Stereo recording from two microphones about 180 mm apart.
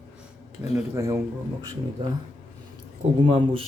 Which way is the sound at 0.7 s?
15° right (ahead or behind).